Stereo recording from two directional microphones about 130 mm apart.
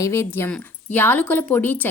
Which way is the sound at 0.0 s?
20° left (ahead or behind).